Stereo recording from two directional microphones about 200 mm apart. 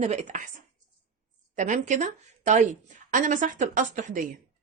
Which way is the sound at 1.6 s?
40° right (ahead or behind).